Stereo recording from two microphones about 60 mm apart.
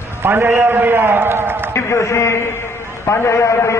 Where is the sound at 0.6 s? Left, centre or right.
Right.